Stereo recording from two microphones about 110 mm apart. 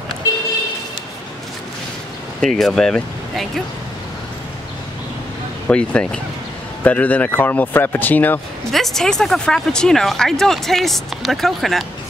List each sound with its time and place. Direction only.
2.4 s speech: 5° left (ahead or behind)
5.7 s speech: 10° left (ahead or behind)
8.7 s speech: 5° left (ahead or behind)